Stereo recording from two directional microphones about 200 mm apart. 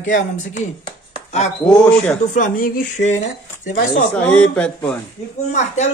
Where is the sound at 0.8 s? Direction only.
35° left (ahead or behind).